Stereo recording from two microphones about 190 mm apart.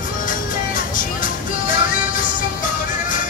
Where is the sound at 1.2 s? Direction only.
45° left (ahead or behind).